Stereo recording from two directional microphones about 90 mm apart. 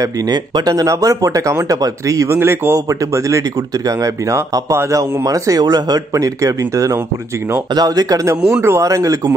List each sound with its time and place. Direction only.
0.0 s speech: 45° right (ahead or behind)
2.2 s a man's voice: 25° right (ahead or behind)
8.5 s a man's voice: 30° right (ahead or behind)
8.8 s speech: 40° right (ahead or behind)